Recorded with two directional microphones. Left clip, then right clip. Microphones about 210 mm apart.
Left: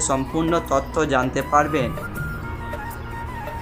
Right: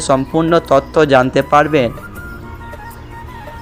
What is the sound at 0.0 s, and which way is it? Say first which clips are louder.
Speech: right 8 dB; 25° right (ahead or behind).